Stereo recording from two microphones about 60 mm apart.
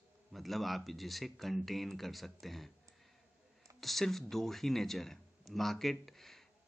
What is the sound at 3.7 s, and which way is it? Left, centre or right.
A man's voice, centre.